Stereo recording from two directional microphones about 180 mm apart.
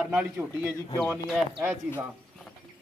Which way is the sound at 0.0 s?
10° right (ahead or behind).